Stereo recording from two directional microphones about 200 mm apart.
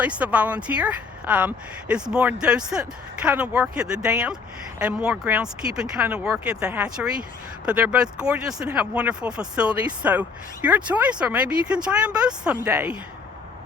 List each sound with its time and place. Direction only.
0.0 s speech: 5° right (ahead or behind)